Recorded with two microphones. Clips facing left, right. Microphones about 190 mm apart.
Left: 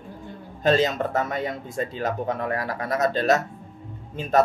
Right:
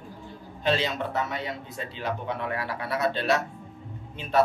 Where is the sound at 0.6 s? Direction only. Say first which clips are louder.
Left 6 dB; 45° left (ahead or behind).